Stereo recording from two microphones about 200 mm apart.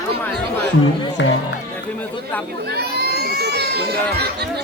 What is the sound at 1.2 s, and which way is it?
Speech, 60° left (ahead or behind).